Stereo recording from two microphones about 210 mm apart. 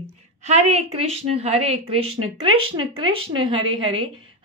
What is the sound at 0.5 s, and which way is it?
A woman's voice, 30° right (ahead or behind).